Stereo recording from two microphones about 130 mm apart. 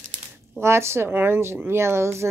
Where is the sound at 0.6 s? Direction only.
20° right (ahead or behind).